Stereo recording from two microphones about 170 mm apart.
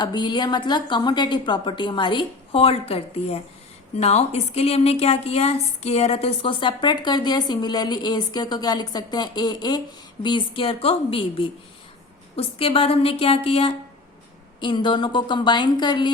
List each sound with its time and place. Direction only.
0.0 s a woman's voice: 25° left (ahead or behind)